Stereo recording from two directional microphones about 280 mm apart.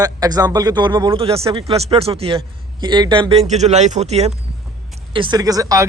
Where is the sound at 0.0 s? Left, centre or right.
Centre.